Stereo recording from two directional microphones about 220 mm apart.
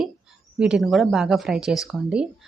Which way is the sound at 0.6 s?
Centre (ahead or behind).